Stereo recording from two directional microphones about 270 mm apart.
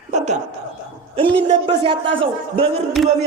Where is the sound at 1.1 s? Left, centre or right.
Centre.